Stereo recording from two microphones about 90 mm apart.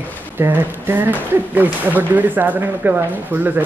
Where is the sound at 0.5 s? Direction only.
20° right (ahead or behind).